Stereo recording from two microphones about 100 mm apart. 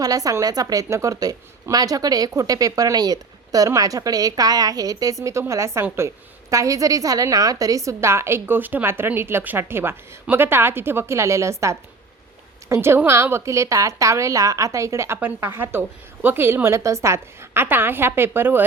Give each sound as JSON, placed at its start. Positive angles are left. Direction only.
{"t": 0.0, "sound": "a woman's voice", "side_deg": -35}